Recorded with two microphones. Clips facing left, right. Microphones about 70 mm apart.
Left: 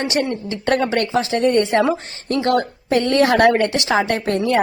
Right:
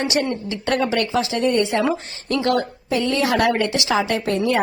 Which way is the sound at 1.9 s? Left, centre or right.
Left.